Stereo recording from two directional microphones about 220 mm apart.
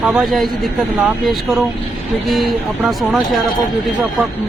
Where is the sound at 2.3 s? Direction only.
Centre (ahead or behind).